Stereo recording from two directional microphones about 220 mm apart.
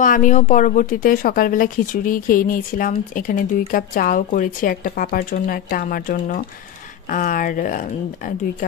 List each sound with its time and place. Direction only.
0.0 s speech: 35° left (ahead or behind)